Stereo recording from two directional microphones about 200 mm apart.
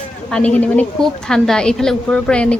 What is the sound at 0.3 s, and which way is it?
A woman's voice, 5° left (ahead or behind).